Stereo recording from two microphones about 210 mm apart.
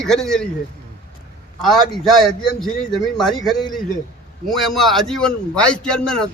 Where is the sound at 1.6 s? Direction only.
Centre (ahead or behind).